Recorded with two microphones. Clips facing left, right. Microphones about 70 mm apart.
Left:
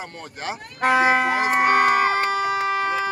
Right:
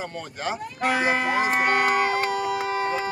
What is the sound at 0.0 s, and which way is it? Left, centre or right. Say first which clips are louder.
Speech: right 2 dB; centre.